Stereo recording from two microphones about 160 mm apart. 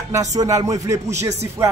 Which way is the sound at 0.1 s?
20° right (ahead or behind).